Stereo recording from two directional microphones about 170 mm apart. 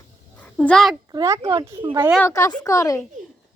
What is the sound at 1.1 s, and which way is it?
Speech, 20° right (ahead or behind).